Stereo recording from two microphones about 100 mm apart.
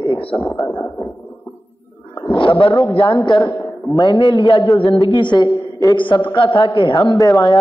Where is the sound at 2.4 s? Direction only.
65° left (ahead or behind).